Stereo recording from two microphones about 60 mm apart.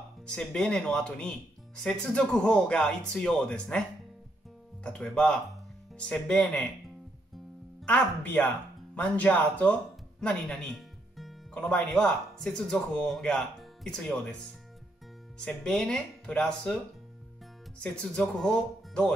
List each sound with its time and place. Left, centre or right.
0.3 s speech: centre
4.8 s speech: centre
7.8 s speech: centre
10.2 s music: centre
11.5 s speech: centre
11.8 s speech: centre
15.3 s speech: centre